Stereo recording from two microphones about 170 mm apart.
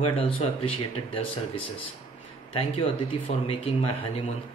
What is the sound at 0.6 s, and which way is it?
Speech, 30° left (ahead or behind).